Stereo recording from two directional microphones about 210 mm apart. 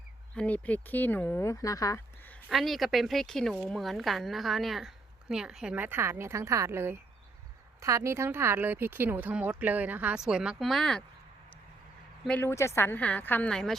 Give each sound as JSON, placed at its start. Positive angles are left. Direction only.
{"t": 0.3, "sound": "speech", "side_deg": 5}
{"t": 12.2, "sound": "a woman's voice", "side_deg": 10}